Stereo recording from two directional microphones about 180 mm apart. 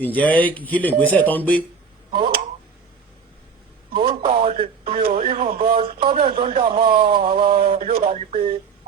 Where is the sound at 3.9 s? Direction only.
25° right (ahead or behind).